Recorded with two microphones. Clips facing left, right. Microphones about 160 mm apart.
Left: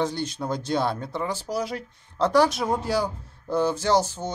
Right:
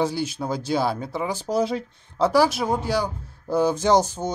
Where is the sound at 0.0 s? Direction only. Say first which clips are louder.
Right 2 dB; 5° right (ahead or behind).